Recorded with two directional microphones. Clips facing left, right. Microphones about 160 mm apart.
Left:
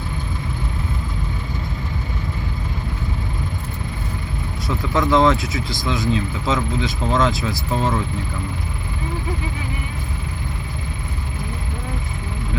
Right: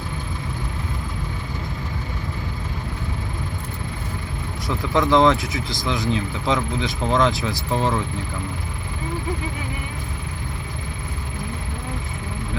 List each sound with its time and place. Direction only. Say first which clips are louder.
4.9 s speech: even; 20° right (ahead or behind)